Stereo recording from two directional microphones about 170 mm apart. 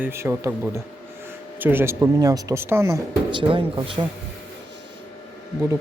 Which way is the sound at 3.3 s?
30° right (ahead or behind).